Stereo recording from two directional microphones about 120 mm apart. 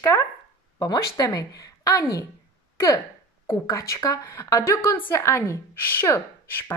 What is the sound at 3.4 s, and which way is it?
A woman's voice, 25° left (ahead or behind).